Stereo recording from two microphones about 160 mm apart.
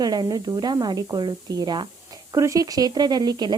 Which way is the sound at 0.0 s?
25° right (ahead or behind).